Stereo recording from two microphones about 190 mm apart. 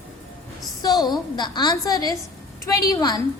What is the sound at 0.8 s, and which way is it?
A woman's voice, 20° left (ahead or behind).